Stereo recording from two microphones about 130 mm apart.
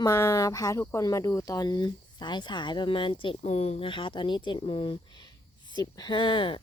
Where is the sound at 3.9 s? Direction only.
40° left (ahead or behind).